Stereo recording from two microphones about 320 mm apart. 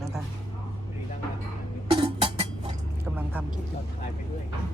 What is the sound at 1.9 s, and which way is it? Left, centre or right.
Cough, centre.